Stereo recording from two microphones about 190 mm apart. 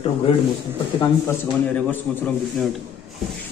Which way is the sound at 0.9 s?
15° left (ahead or behind).